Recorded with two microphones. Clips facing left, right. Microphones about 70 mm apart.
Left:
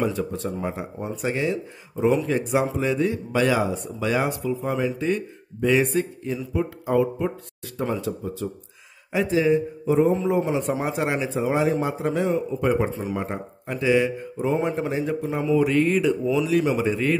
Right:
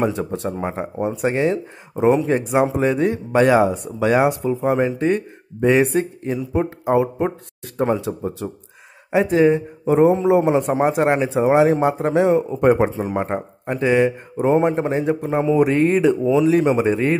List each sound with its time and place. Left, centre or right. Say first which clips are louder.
0.0 s a man's voice: right 4 dB; right
10.5 s a man's voice: right 7 dB; right